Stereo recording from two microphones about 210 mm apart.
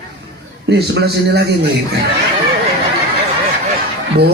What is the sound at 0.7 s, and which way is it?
Speech, 50° right (ahead or behind).